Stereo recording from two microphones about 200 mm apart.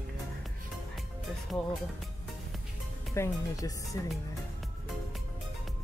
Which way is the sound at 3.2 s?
15° left (ahead or behind).